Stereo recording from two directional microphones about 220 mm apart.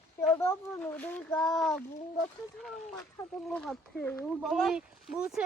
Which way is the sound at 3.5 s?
5° left (ahead or behind).